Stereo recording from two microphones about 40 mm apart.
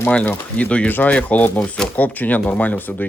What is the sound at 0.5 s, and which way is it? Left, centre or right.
Speech, left.